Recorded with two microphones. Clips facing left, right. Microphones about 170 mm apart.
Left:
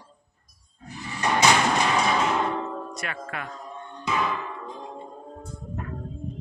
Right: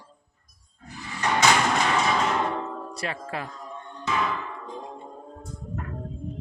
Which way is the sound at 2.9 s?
30° right (ahead or behind).